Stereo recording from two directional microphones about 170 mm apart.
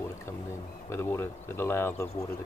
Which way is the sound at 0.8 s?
15° left (ahead or behind).